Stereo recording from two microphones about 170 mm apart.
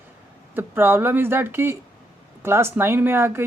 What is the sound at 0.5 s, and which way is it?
Speech, 10° right (ahead or behind).